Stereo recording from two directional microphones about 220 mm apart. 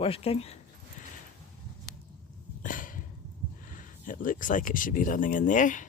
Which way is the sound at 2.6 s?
35° left (ahead or behind).